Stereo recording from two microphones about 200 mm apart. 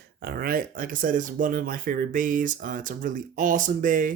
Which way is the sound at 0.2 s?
50° right (ahead or behind).